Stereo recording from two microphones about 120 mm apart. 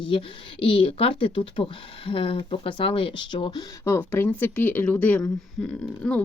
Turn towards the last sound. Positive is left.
turn(degrees=10)  # may be behind; listen again after turning